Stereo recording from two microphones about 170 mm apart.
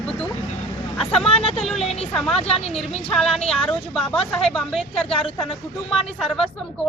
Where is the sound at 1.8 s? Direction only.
35° left (ahead or behind).